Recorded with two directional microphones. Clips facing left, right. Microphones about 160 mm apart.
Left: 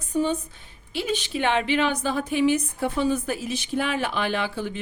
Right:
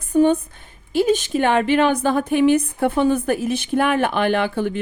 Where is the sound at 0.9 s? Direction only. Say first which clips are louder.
Right 10 dB; 45° right (ahead or behind).